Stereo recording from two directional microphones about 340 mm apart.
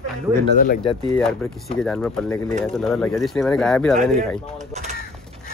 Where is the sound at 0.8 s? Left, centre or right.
Centre.